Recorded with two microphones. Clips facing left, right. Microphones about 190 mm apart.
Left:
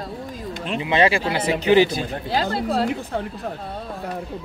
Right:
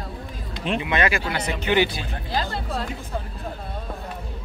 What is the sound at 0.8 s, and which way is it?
Speech, 30° left (ahead or behind).